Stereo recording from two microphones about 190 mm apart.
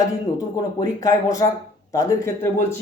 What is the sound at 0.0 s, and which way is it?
Speech, 20° left (ahead or behind).